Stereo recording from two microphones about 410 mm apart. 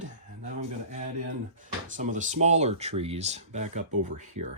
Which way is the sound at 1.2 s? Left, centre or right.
Centre.